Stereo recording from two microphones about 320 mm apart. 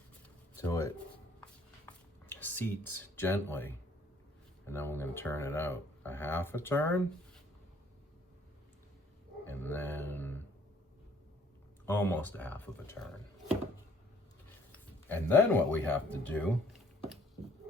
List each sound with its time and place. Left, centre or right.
0.5 s shuffling cards: centre
1.9 s a sound: centre
4.6 s speech: centre
9.5 s a sound: centre
11.9 s speech: centre
14.7 s speech: centre